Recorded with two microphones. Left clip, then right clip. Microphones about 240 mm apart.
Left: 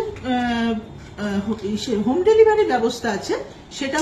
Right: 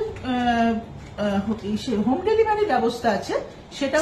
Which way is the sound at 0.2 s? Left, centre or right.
Centre.